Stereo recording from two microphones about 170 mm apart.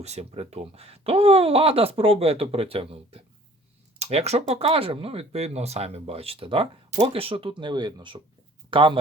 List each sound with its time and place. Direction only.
0.0 s speech: 40° right (ahead or behind)